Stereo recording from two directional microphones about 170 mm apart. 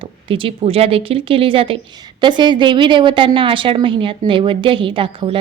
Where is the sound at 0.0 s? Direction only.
30° right (ahead or behind).